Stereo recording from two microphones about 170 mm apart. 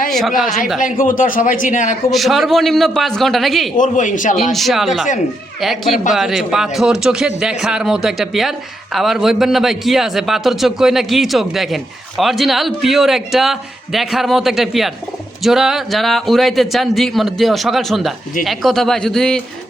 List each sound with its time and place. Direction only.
0.1 s speech: centre (ahead or behind)
0.4 s speech: 50° left (ahead or behind)
2.1 s speech: centre (ahead or behind)
3.8 s speech: 50° left (ahead or behind)
4.5 s speech: centre (ahead or behind)